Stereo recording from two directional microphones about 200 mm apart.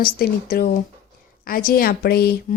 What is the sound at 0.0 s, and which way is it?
A woman's voice, 50° left (ahead or behind).